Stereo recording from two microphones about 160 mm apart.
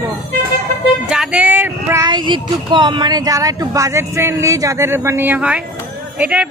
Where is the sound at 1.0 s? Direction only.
5° right (ahead or behind).